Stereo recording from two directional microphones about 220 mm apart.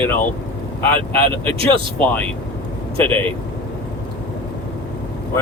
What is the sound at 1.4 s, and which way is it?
Speech, 25° right (ahead or behind).